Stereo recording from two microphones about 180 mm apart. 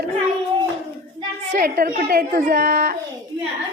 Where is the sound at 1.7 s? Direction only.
55° right (ahead or behind).